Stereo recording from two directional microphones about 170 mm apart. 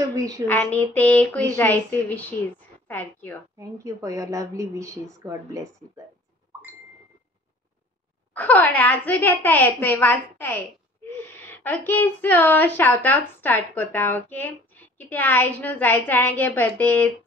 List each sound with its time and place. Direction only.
0.1 s a woman's voice: 20° right (ahead or behind)
0.5 s a woman's voice: 10° left (ahead or behind)
3.5 s speech: 20° right (ahead or behind)
8.3 s a woman's voice: 10° left (ahead or behind)